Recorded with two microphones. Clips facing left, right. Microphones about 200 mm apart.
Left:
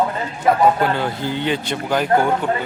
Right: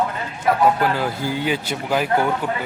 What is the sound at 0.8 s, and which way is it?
A man's voice, 5° right (ahead or behind).